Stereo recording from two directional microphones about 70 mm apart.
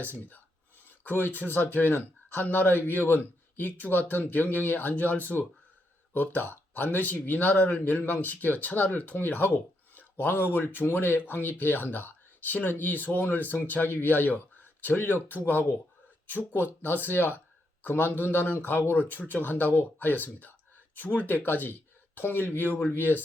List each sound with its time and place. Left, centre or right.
1.0 s speech: left